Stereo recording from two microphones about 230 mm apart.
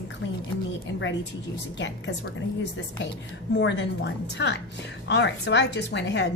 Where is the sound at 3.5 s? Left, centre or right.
Left.